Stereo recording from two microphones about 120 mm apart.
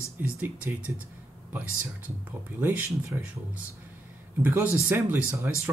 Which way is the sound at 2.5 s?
15° right (ahead or behind).